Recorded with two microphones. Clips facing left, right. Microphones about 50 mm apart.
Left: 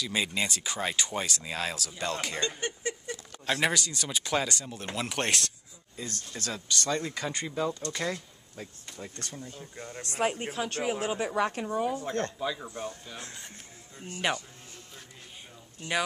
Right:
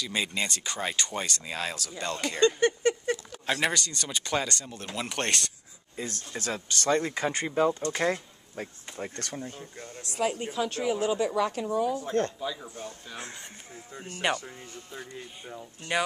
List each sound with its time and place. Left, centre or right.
0.0 s speech: centre
2.8 s patter: right
3.4 s speech: centre
6.3 s speech: right
10.0 s speech: left
10.9 s speech: left
12.4 s speech: centre
13.1 s speech: centre